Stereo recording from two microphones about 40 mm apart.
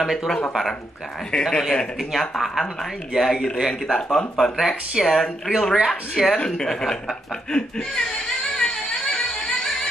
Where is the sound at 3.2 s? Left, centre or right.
Centre.